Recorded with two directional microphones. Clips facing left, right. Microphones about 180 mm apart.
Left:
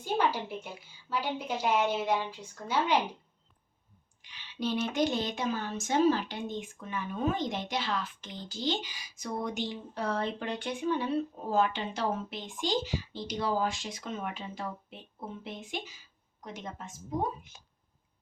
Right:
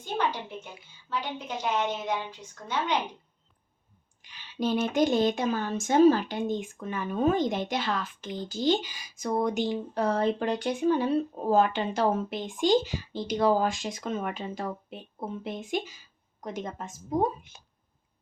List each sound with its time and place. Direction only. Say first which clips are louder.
0.0 s a sound: left 1 dB; 10° left (ahead or behind)
1.1 s a woman's voice: left 1 dB; 10° left (ahead or behind)
4.2 s speech: right 5 dB; 45° right (ahead or behind)